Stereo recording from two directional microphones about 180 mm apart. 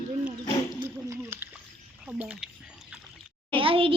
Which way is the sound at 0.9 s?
15° right (ahead or behind).